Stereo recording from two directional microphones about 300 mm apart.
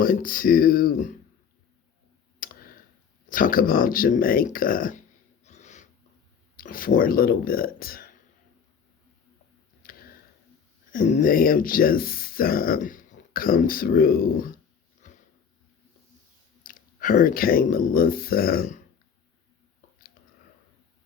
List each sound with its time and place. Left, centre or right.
0.0 s speech: left
2.4 s clicking: left
3.2 s speech: left
5.5 s snort: left
6.6 s speech: left
9.8 s a sound: left
10.9 s speech: left
15.0 s a sound: left
16.6 s speech: left